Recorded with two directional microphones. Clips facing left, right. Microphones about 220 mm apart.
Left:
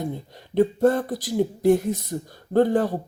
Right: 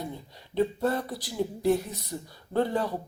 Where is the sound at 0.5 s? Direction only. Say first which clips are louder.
Left 7 dB; 50° left (ahead or behind).